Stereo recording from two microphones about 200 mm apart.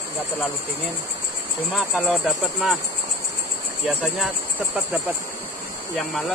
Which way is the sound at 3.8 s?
Centre (ahead or behind).